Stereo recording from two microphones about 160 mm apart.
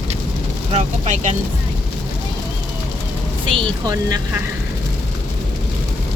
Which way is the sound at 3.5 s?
25° right (ahead or behind).